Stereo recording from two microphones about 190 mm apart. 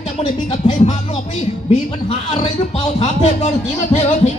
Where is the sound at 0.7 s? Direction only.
40° left (ahead or behind).